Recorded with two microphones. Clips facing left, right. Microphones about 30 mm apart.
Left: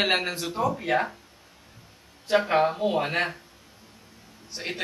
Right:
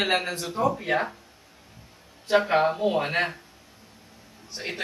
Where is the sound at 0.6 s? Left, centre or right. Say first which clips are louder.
Right 1 dB; centre.